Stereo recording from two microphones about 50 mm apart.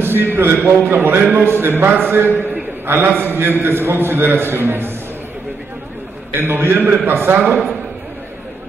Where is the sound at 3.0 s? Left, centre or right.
Right.